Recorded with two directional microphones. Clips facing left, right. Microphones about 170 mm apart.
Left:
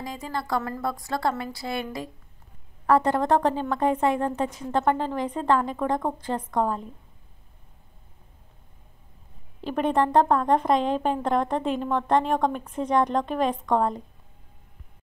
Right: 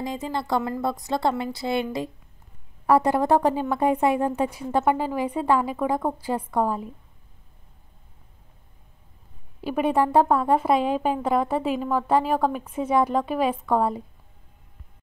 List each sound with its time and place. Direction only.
0.0 s a woman's voice: 25° right (ahead or behind)
2.9 s a woman's voice: 10° right (ahead or behind)
9.6 s a woman's voice: 10° right (ahead or behind)